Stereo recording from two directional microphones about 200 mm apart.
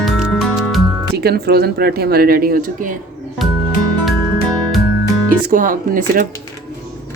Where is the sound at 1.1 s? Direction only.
50° right (ahead or behind).